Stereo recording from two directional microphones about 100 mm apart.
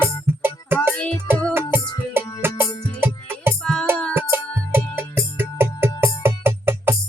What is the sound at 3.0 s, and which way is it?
Music, 25° right (ahead or behind).